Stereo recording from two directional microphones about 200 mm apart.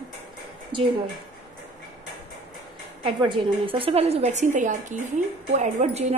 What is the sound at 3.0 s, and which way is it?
A woman's voice, 25° right (ahead or behind).